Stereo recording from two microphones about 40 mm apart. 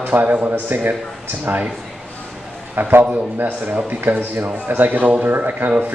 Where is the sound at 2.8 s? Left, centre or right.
Right.